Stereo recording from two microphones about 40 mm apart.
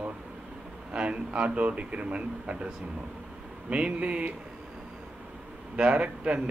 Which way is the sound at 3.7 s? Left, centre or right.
Right.